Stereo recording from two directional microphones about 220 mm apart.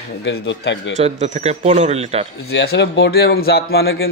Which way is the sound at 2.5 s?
50° left (ahead or behind).